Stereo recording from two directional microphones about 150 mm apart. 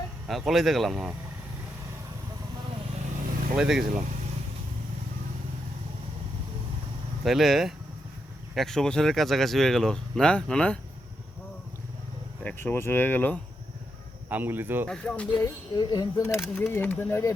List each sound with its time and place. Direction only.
0.3 s speech: centre (ahead or behind)
3.5 s speech: 5° right (ahead or behind)
7.3 s speech: centre (ahead or behind)
12.4 s speech: 10° left (ahead or behind)
14.3 s speech: 10° right (ahead or behind)
14.8 s speech: 5° left (ahead or behind)
15.7 s speech: 30° left (ahead or behind)
16.2 s speech: 15° left (ahead or behind)